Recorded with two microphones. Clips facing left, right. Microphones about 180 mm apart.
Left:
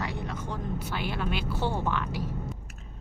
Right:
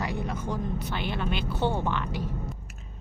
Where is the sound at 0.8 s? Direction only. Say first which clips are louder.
Right 1 dB; 5° left (ahead or behind).